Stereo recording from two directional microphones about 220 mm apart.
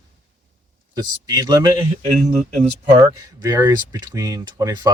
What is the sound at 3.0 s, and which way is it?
Speech, 15° right (ahead or behind).